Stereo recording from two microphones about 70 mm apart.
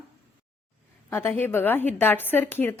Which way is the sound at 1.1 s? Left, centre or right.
Left.